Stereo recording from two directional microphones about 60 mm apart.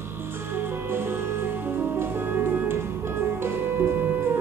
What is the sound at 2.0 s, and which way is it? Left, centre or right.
Music, right.